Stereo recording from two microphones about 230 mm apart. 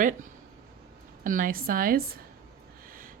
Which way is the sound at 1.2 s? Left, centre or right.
Right.